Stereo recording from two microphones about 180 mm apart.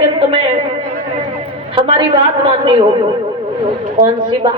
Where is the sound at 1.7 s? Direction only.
30° right (ahead or behind).